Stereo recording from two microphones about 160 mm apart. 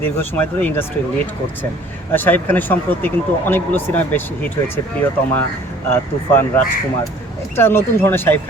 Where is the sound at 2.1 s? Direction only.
10° left (ahead or behind).